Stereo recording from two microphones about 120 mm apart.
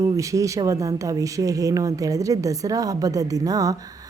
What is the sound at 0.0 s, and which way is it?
Speech, 25° right (ahead or behind).